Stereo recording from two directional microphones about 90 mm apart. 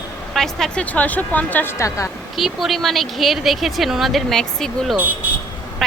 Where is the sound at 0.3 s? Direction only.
5° left (ahead or behind).